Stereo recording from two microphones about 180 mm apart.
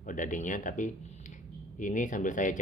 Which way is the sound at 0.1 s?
45° left (ahead or behind).